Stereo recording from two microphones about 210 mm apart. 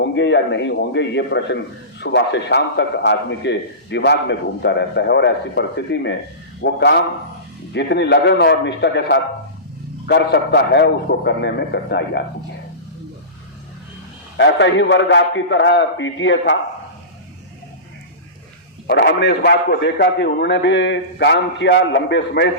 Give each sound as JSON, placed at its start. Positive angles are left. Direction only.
{"t": 0.0, "sound": "a man's voice", "side_deg": 55}
{"t": 14.3, "sound": "a man's voice", "side_deg": 60}
{"t": 18.9, "sound": "a man's voice", "side_deg": 55}